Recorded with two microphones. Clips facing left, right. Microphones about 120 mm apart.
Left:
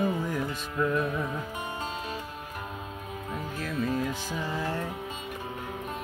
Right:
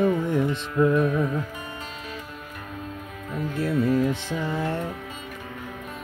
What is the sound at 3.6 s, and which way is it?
Music, 25° right (ahead or behind).